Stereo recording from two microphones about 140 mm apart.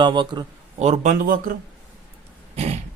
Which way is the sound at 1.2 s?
85° right.